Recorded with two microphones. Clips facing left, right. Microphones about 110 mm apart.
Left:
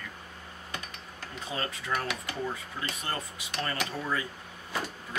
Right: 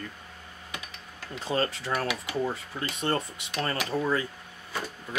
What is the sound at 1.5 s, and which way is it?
Speech, 45° right (ahead or behind).